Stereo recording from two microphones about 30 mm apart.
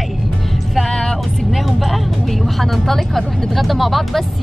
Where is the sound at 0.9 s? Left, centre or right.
Centre.